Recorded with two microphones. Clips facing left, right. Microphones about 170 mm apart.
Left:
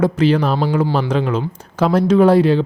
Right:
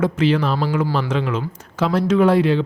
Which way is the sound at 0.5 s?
25° left (ahead or behind).